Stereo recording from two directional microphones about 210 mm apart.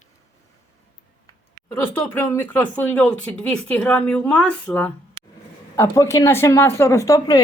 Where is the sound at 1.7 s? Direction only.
10° left (ahead or behind).